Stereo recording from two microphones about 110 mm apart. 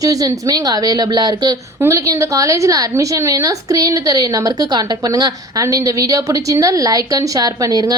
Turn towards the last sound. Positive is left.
turn(degrees=-35)  # may be behind; listen again after turning